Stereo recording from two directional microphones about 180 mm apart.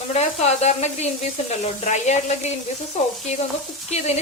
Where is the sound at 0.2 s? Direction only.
35° left (ahead or behind).